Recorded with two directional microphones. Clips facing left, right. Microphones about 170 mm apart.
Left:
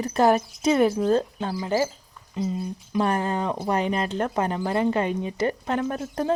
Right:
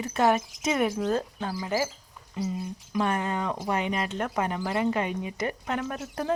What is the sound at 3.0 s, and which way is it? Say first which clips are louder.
Speech: left 3 dB; 35° left (ahead or behind).